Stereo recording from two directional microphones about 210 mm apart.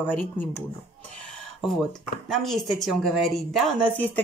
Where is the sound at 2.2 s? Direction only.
Centre (ahead or behind).